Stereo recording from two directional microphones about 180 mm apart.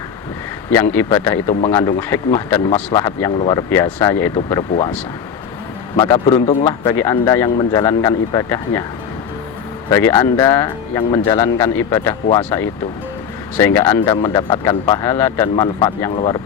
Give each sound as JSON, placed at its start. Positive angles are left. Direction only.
{"t": 0.7, "sound": "speech", "side_deg": 10}
{"t": 6.0, "sound": "speech", "side_deg": 25}
{"t": 10.1, "sound": "speech", "side_deg": 20}